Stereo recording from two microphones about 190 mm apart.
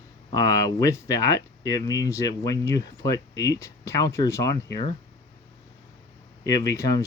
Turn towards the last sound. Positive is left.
turn(degrees=20)  # may be behind; listen again after turning